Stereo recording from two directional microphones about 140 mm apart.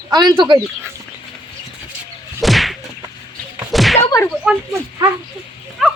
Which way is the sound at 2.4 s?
Centre (ahead or behind).